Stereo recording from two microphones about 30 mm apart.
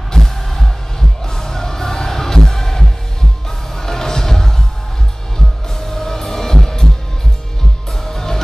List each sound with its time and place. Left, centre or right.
0.1 s heart sounds: centre
1.2 s music: centre
5.8 s music: centre
8.0 s music: centre